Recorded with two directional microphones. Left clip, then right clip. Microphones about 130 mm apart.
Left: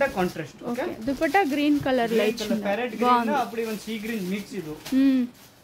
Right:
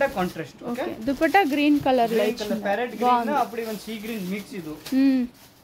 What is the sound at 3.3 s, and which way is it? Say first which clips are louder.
Speech: right 1 dB; 5° right (ahead or behind).